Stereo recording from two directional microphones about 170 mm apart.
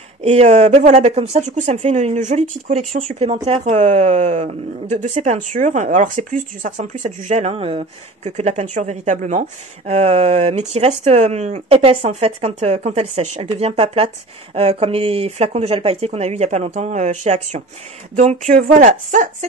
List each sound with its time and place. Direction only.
0.2 s speech: 40° right (ahead or behind)